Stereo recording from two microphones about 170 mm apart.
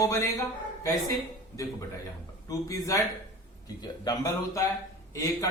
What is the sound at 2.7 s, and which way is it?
A man's voice, 20° left (ahead or behind).